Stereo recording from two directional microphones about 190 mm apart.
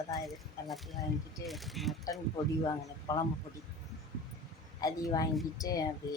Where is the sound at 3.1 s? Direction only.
20° left (ahead or behind).